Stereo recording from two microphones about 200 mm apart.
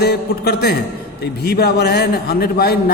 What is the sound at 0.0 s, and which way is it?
A man's voice, 55° left (ahead or behind).